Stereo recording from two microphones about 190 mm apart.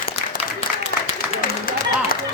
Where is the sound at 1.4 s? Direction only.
50° left (ahead or behind).